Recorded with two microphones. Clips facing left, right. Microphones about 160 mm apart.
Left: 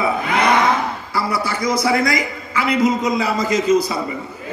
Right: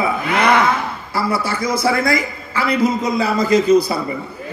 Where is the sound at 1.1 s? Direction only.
25° right (ahead or behind).